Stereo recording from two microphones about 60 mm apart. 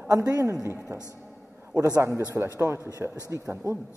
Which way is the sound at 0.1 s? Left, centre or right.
Right.